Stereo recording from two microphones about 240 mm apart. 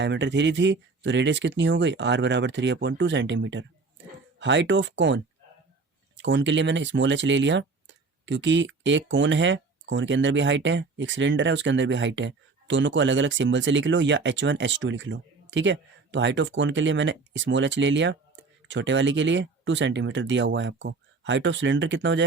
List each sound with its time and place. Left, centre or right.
0.0 s speech: right